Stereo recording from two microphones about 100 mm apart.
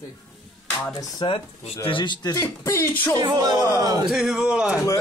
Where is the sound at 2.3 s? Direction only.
30° left (ahead or behind).